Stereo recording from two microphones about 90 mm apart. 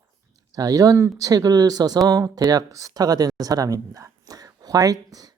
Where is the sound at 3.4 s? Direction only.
45° right (ahead or behind).